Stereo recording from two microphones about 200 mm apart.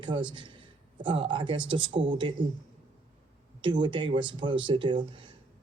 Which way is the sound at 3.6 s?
25° right (ahead or behind).